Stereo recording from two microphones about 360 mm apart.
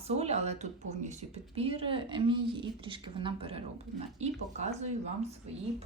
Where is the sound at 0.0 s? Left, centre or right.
Centre.